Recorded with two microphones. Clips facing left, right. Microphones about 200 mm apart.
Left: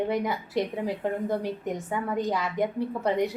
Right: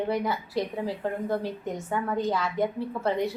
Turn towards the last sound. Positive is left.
turn(degrees=15)  # may be behind; listen again after turning